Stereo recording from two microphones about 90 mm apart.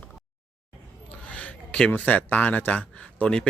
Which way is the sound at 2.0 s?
15° left (ahead or behind).